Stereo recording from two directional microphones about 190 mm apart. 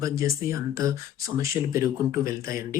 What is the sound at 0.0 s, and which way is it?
Speech, 15° right (ahead or behind).